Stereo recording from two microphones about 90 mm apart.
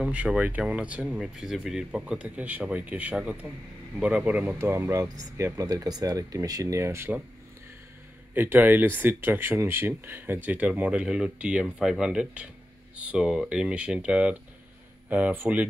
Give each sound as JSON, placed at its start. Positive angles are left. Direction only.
{"t": 0.0, "sound": "speech", "side_deg": -10}
{"t": 1.0, "sound": "speech", "side_deg": 0}
{"t": 4.6, "sound": "speech", "side_deg": -30}
{"t": 5.4, "sound": "speech", "side_deg": -40}
{"t": 8.4, "sound": "speech", "side_deg": -20}